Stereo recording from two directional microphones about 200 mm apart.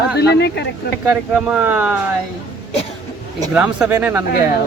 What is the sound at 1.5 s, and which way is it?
Speech, 5° right (ahead or behind).